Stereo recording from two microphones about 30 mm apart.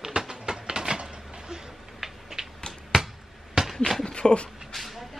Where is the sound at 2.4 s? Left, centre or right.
Right.